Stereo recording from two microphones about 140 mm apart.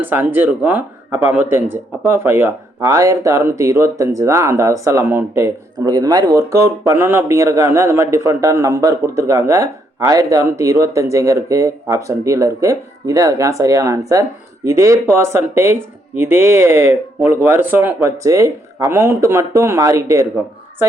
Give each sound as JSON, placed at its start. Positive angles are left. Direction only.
{"t": 0.0, "sound": "speech", "side_deg": -15}